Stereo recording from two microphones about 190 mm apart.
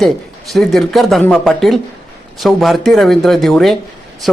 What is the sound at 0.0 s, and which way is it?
A man's voice, centre (ahead or behind).